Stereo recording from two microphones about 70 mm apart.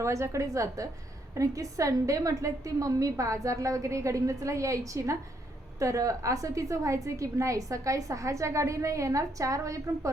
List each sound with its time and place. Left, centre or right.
0.0 s a woman's voice: right